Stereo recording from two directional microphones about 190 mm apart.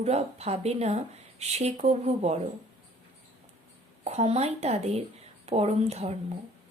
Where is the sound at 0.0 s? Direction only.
35° right (ahead or behind).